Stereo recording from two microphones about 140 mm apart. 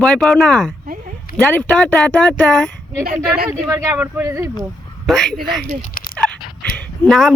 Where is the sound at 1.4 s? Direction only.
10° left (ahead or behind).